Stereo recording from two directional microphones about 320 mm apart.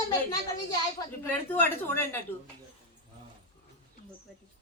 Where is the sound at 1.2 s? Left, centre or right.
Centre.